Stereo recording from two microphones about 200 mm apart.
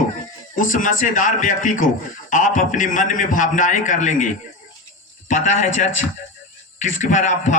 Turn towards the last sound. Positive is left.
turn(degrees=40)  # may be behind; listen again after turning